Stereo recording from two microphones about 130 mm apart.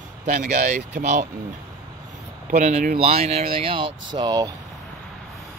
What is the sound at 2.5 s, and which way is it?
Speech, 65° right (ahead or behind).